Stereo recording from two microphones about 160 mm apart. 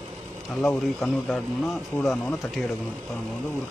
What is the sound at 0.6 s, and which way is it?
Speech, centre (ahead or behind).